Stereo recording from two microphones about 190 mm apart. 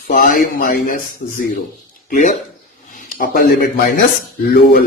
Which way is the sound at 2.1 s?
40° left (ahead or behind).